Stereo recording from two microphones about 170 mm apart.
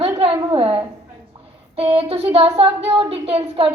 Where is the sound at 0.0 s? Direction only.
35° right (ahead or behind).